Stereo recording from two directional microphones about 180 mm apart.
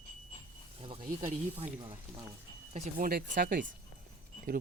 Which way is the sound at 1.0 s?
45° right (ahead or behind).